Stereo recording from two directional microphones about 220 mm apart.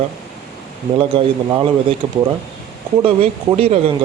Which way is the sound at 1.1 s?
25° right (ahead or behind).